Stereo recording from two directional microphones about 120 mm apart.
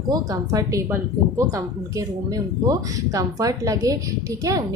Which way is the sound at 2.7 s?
30° right (ahead or behind).